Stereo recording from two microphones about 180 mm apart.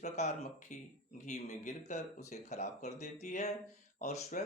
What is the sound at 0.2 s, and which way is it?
Speech, 40° left (ahead or behind).